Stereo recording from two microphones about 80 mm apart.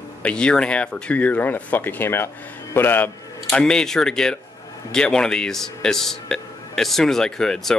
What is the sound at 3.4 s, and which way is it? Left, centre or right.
A man's voice, centre.